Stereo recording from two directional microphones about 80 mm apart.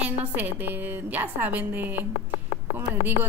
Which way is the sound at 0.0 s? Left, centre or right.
Centre.